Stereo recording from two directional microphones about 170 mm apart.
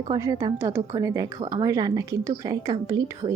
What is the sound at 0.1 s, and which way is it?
A woman's voice, 20° right (ahead or behind).